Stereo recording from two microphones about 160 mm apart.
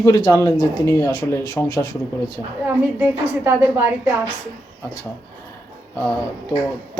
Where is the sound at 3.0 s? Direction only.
15° right (ahead or behind).